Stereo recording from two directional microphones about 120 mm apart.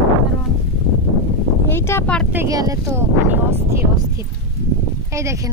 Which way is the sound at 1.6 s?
20° left (ahead or behind).